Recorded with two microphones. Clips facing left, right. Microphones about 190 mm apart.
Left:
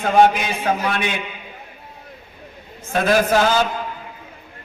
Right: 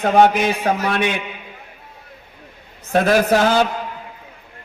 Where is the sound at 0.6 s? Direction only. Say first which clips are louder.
Right 2 dB; 35° right (ahead or behind).